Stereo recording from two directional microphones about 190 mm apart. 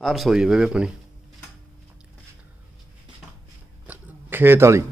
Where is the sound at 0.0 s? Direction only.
Centre (ahead or behind).